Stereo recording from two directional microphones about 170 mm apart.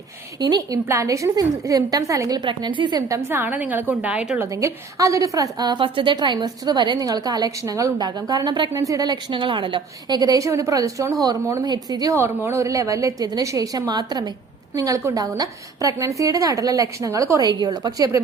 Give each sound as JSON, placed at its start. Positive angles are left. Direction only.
{"t": 0.3, "sound": "a woman's voice", "side_deg": -25}
{"t": 4.5, "sound": "a woman's voice", "side_deg": -20}